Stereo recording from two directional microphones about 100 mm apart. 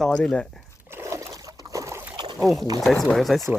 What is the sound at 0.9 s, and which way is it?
Trickle, 30° right (ahead or behind).